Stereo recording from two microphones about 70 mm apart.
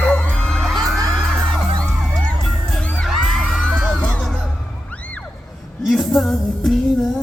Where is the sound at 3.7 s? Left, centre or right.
Centre.